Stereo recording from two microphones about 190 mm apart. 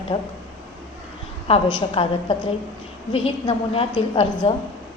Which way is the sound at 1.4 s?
30° left (ahead or behind).